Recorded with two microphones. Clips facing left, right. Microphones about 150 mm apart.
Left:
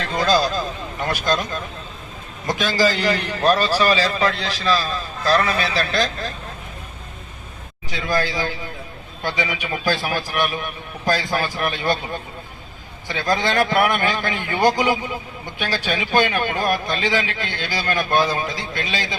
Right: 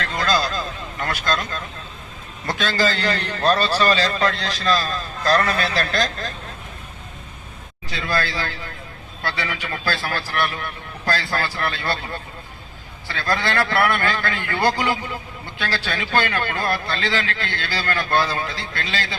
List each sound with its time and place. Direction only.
0.0 s a man's voice: 20° left (ahead or behind); by 6.1 s centre (ahead or behind)
7.9 s a man's voice: 15° left (ahead or behind)